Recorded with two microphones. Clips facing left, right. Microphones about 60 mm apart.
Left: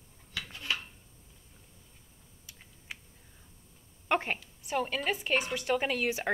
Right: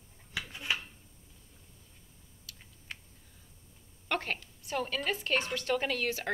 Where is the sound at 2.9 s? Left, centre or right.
Centre.